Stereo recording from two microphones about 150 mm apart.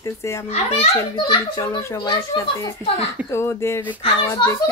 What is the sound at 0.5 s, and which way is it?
A child's voice, 40° left (ahead or behind).